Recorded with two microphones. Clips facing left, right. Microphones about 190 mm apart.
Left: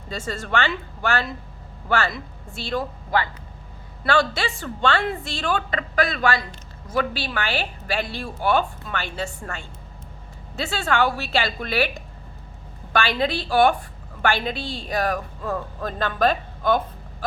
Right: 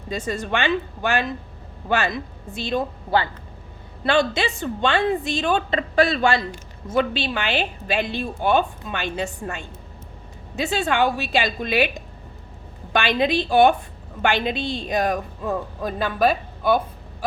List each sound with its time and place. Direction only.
0.1 s a woman's voice: 15° right (ahead or behind)